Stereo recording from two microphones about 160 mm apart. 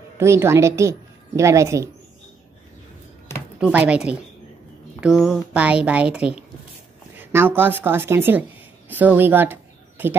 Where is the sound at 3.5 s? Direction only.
5° right (ahead or behind).